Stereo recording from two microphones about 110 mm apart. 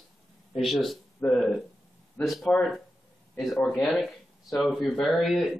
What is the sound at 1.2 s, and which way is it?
Speech, 15° left (ahead or behind).